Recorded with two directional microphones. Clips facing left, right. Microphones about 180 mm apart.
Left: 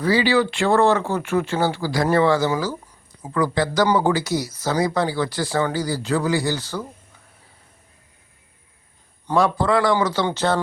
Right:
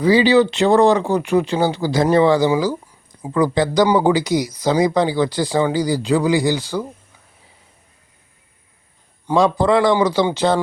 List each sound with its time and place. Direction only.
0.0 s speech: 20° right (ahead or behind)
9.2 s speech: 15° right (ahead or behind)